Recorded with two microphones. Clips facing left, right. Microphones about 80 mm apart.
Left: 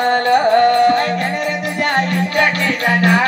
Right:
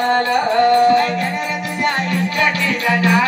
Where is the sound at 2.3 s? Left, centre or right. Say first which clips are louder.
Left 3 dB; left.